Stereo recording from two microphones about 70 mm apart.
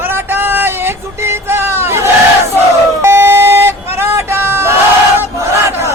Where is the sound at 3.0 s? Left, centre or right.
Right.